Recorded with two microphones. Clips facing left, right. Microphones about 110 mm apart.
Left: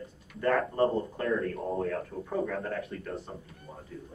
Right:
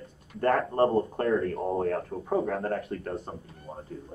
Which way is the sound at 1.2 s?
30° right (ahead or behind).